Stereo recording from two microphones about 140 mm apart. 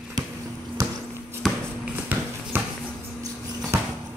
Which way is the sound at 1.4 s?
Centre (ahead or behind).